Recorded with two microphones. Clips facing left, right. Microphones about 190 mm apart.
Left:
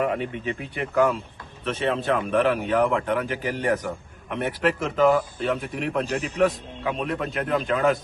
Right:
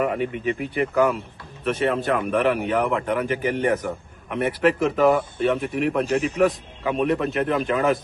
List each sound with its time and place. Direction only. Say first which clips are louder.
0.0 s speech: right 2 dB; 5° right (ahead or behind)
6.1 s speech: right 5 dB; 35° left (ahead or behind)
6.4 s speech: right 2 dB; centre (ahead or behind)